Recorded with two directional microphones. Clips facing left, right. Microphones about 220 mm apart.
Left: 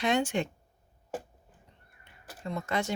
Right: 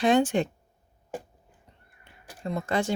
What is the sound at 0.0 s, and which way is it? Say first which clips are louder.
Speech: right 6 dB; 35° right (ahead or behind).